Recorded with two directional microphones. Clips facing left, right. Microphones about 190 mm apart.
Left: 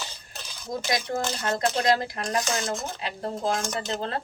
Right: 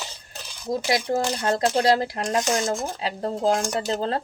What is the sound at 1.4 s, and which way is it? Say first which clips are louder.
Speech: right 4 dB; 35° right (ahead or behind).